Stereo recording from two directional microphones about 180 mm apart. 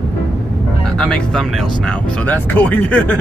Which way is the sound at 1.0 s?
5° left (ahead or behind).